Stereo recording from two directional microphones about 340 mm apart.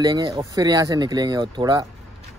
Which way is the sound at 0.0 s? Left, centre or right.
Centre.